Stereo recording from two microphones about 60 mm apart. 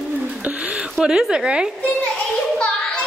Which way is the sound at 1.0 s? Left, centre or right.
Centre.